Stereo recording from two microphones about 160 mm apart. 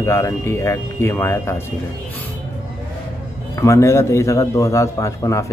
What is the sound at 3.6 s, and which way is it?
A man's voice, 20° left (ahead or behind).